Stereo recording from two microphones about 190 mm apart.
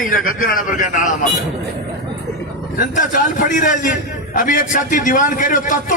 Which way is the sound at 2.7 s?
45° left (ahead or behind).